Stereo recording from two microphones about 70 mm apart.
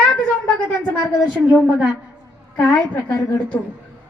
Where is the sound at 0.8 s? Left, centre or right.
Left.